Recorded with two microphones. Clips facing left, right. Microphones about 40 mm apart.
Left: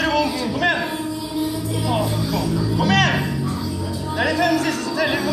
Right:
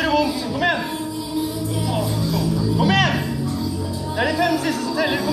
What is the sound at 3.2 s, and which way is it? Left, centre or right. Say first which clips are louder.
Music: even; centre.